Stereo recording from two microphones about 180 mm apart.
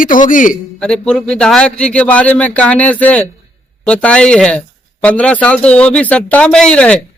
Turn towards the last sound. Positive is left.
turn(degrees=5)  # may be behind; listen again after turning